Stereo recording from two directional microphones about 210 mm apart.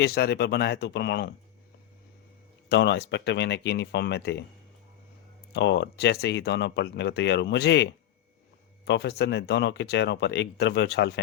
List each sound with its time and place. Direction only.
0.0 s speech: 50° left (ahead or behind)
2.6 s speech: 55° left (ahead or behind)
5.5 s speech: 55° left (ahead or behind)